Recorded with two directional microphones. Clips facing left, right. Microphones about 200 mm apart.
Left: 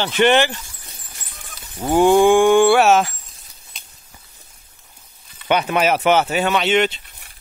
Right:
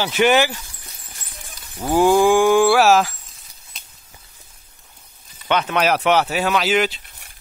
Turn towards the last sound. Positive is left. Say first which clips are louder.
# left 1 dB
turn(degrees=0)  # may be behind; listen again after turning